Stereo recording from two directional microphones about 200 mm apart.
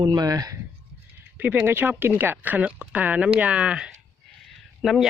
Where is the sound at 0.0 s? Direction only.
20° right (ahead or behind).